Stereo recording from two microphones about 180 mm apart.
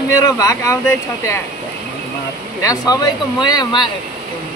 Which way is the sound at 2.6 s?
20° left (ahead or behind).